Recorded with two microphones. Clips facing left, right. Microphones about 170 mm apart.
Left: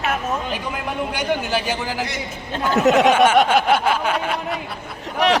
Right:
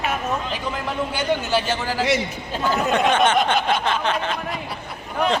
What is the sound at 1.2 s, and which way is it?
Speech, 15° left (ahead or behind).